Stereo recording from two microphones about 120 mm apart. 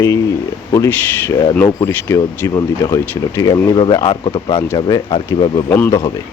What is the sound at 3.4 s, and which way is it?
Speech, 30° left (ahead or behind).